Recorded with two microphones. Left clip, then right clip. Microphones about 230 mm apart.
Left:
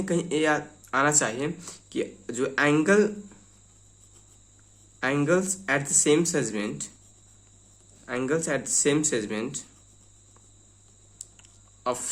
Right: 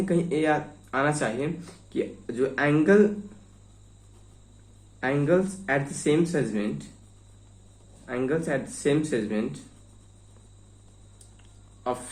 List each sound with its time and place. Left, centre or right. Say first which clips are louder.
0.0 s speech: even; left
4.9 s speech: even; left
8.0 s speech: even; left